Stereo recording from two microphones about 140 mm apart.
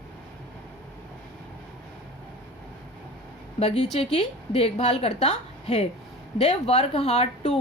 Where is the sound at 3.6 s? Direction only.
50° left (ahead or behind).